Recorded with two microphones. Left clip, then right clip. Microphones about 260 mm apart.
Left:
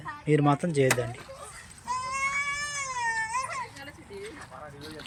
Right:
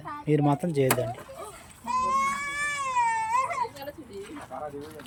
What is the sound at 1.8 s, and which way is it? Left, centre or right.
Goat, right.